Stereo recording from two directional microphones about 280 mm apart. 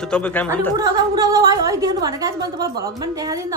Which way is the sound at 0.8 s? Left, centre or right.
Centre.